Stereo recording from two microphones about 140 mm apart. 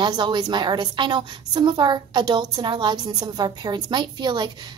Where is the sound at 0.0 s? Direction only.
30° right (ahead or behind).